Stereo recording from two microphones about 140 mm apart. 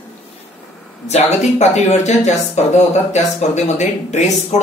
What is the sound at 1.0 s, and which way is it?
Speech, 50° left (ahead or behind).